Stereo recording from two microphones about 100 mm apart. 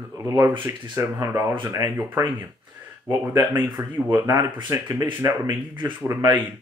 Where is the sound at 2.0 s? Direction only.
20° right (ahead or behind).